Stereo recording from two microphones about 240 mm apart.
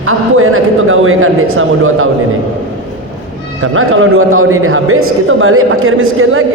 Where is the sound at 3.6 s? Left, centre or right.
Right.